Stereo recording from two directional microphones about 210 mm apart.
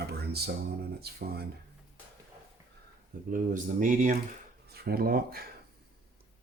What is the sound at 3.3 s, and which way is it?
Speech, 40° right (ahead or behind).